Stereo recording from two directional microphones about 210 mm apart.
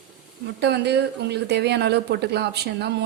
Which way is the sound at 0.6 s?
50° right (ahead or behind).